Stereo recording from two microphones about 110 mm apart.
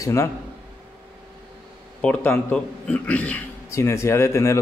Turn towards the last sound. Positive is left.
turn(degrees=25)  # may be behind; listen again after turning